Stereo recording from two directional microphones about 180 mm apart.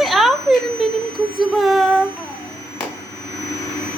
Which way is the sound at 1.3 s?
Centre (ahead or behind).